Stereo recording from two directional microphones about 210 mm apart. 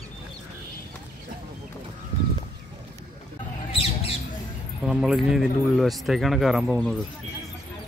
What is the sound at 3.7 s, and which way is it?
Squawk, 30° left (ahead or behind).